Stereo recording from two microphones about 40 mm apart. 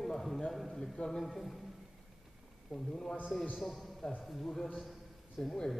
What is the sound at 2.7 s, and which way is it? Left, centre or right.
Speech, centre.